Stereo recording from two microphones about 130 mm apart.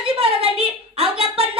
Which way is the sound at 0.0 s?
45° right (ahead or behind).